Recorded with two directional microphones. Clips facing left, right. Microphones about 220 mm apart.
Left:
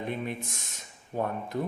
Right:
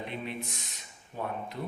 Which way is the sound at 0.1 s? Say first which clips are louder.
Left 4 dB; 45° left (ahead or behind).